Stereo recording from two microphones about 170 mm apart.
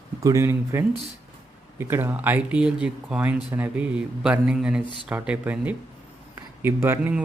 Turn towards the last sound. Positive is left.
turn(degrees=-10)  # may be behind; listen again after turning